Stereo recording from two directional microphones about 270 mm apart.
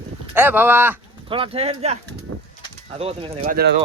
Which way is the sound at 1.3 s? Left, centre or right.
Right.